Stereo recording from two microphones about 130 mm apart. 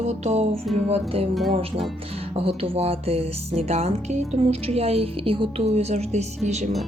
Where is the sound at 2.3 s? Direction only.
45° right (ahead or behind); by 6.7 s 60° right (ahead or behind).